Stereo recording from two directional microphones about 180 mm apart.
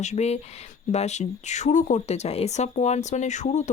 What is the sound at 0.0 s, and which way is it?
Speech, 40° left (ahead or behind).